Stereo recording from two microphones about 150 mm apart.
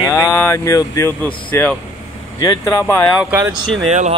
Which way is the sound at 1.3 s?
10° left (ahead or behind).